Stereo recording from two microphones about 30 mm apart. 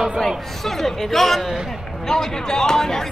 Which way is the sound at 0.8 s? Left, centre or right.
Centre.